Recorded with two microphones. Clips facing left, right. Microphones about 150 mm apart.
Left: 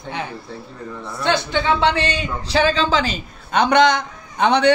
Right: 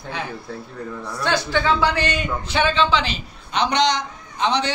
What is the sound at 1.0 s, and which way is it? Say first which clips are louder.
A man's voice: left 2 dB; 25° left (ahead or behind).